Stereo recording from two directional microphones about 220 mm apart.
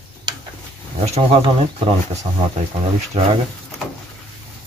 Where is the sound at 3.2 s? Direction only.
30° right (ahead or behind).